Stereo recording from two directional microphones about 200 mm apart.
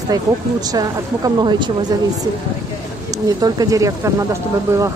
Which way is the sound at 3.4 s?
20° right (ahead or behind).